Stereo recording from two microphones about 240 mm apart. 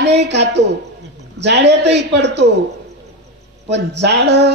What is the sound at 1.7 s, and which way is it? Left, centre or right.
Speech, right.